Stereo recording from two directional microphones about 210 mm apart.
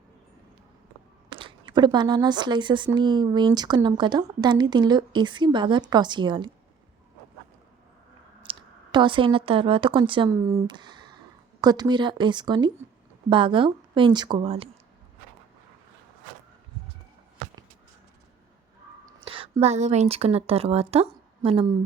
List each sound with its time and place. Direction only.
1.3 s speech: 25° right (ahead or behind)
8.4 s speech: 20° right (ahead or behind)
19.0 s a woman's voice: 25° right (ahead or behind)